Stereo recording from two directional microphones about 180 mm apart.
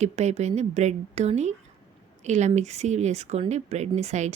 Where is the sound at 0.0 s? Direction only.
40° right (ahead or behind).